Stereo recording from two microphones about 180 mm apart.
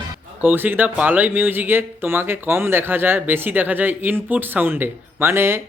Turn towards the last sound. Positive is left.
turn(degrees=-15)  # may be behind; listen again after turning